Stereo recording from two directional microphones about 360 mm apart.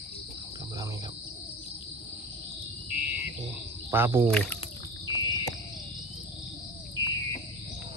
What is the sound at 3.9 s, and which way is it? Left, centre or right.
Speech, centre.